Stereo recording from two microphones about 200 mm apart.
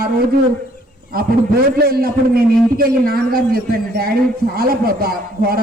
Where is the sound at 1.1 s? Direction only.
50° right (ahead or behind).